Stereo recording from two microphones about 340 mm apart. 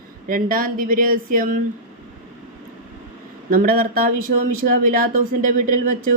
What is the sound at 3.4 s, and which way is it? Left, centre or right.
Speech, right.